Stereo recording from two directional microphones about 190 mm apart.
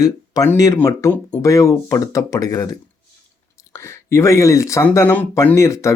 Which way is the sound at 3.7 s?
15° left (ahead or behind).